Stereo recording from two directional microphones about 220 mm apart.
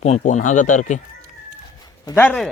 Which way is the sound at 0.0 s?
30° left (ahead or behind).